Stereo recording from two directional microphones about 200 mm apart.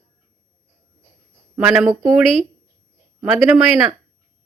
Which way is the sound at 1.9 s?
15° right (ahead or behind).